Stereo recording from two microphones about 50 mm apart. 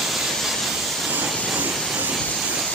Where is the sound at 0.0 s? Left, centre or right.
Centre.